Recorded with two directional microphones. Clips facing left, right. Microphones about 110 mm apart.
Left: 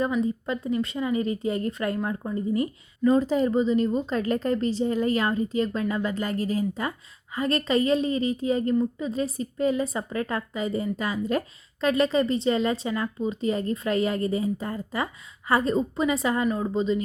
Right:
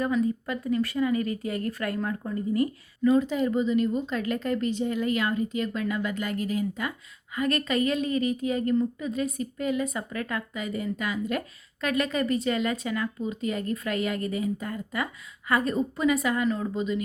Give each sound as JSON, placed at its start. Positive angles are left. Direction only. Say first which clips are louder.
{"t": 0.0, "sound": "a woman's voice", "louder": "left 1 dB", "side_deg": 25}